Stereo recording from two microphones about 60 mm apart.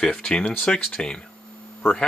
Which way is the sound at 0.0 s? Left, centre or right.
Centre.